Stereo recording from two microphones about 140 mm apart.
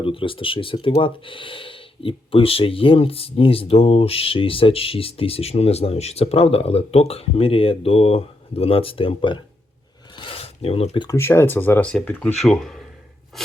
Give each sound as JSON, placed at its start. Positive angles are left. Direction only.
{"t": 0.0, "sound": "speech", "side_deg": 40}
{"t": 10.2, "sound": "a sound", "side_deg": 40}
{"t": 11.0, "sound": "speech", "side_deg": 20}